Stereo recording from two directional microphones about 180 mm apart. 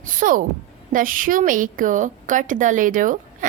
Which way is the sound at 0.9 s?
50° right (ahead or behind).